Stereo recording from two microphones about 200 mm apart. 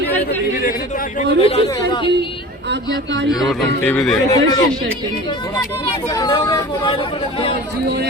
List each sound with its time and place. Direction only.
1.4 s speech: 25° left (ahead or behind)
3.8 s speech: 5° left (ahead or behind)
4.3 s speech: 15° left (ahead or behind)